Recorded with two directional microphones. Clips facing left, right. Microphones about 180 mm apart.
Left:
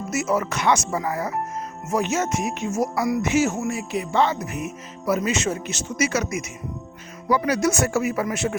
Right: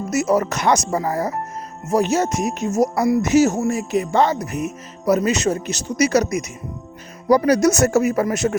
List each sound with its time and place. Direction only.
0.1 s speech: 40° right (ahead or behind)